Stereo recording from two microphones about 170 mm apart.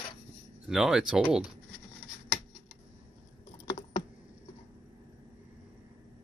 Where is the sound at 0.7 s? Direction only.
5° right (ahead or behind).